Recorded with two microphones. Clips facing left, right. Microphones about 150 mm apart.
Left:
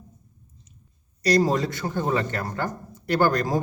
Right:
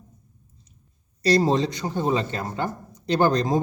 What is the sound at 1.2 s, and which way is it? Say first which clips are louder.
A man's voice: right 1 dB; 30° right (ahead or behind).